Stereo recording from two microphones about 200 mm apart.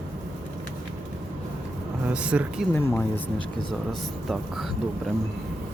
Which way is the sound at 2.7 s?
10° left (ahead or behind).